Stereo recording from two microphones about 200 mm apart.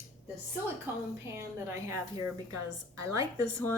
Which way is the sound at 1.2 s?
15° right (ahead or behind).